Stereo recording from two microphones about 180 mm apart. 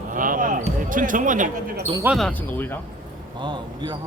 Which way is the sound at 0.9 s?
45° right (ahead or behind).